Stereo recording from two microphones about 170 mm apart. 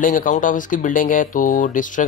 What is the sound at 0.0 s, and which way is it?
Speech, 50° left (ahead or behind).